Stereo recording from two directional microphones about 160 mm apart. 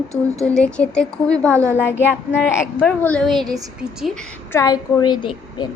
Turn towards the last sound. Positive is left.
turn(degrees=30)  # may be behind; listen again after turning